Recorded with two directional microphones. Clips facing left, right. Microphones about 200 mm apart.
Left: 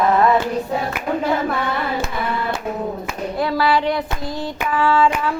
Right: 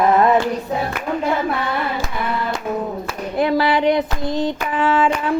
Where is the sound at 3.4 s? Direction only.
20° right (ahead or behind).